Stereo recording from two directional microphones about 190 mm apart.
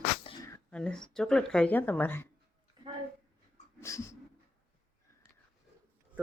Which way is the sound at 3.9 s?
15° left (ahead or behind).